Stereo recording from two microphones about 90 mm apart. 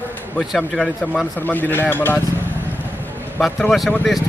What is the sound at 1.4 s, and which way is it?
Speech, 20° left (ahead or behind).